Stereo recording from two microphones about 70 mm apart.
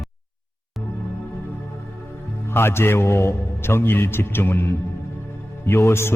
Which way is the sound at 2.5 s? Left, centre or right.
Left.